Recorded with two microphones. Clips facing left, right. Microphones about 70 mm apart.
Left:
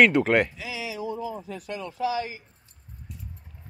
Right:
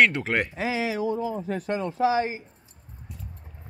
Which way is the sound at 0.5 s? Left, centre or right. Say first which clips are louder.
Right 8 dB; right.